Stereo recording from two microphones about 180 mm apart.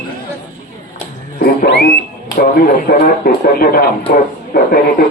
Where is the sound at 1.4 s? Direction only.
65° left (ahead or behind).